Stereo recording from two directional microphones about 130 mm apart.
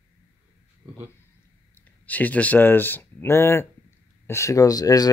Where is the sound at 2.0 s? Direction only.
10° left (ahead or behind).